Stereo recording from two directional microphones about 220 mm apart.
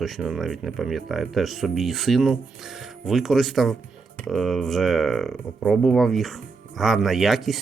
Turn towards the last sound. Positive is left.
turn(degrees=0)  # may be behind; listen again after turning